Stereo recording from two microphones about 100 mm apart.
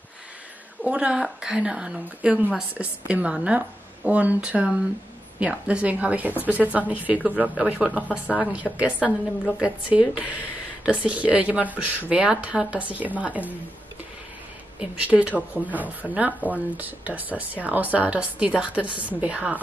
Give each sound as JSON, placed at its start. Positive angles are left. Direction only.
{"t": 0.8, "sound": "speech", "side_deg": -10}
{"t": 14.8, "sound": "speech", "side_deg": -10}